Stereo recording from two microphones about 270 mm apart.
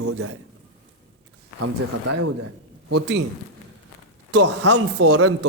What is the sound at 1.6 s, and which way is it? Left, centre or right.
Speech, right.